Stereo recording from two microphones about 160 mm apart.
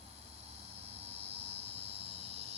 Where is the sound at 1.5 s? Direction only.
40° right (ahead or behind).